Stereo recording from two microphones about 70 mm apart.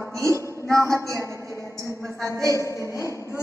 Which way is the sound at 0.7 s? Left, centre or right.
Right.